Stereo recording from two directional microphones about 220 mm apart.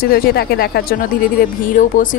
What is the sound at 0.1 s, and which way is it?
Speech, 45° left (ahead or behind).